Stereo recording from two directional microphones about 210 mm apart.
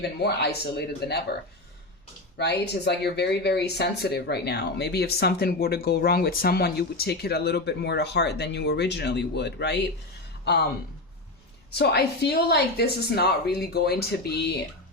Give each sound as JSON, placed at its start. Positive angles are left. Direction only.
{"t": 0.0, "sound": "speech", "side_deg": 50}
{"t": 2.4, "sound": "speech", "side_deg": 50}
{"t": 11.7, "sound": "speech", "side_deg": 50}